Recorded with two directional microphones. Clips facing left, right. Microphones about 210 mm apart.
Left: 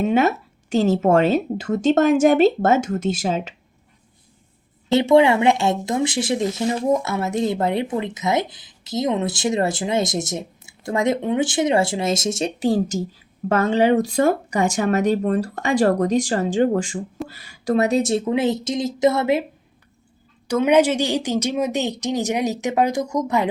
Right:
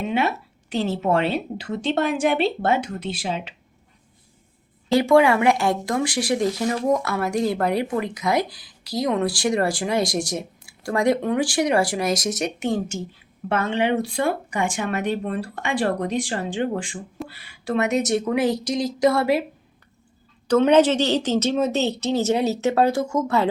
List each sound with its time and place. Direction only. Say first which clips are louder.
0.0 s a woman's voice: left 5 dB; 45° left (ahead or behind)
4.9 s speech: left 2 dB; 25° left (ahead or behind)
20.5 s a woman's voice: right 1 dB; 10° left (ahead or behind)